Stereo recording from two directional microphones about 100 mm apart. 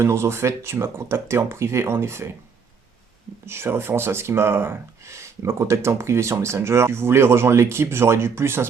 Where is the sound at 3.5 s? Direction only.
25° right (ahead or behind).